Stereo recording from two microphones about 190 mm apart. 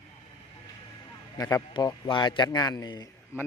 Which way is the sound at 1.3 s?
20° left (ahead or behind).